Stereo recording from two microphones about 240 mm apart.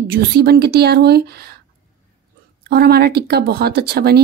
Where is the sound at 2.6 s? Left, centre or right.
Right.